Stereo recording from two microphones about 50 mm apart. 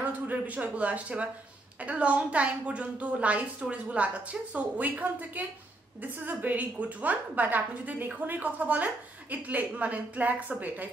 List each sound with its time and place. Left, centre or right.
0.0 s a woman's voice: right